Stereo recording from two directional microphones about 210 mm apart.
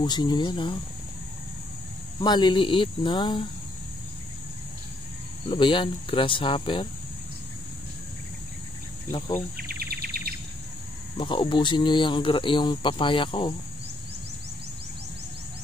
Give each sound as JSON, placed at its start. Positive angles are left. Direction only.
{"t": 0.0, "sound": "speech", "side_deg": 20}
{"t": 2.1, "sound": "speech", "side_deg": 20}
{"t": 5.5, "sound": "speech", "side_deg": 25}
{"t": 9.6, "sound": "bird", "side_deg": -45}
{"t": 11.1, "sound": "speech", "side_deg": 20}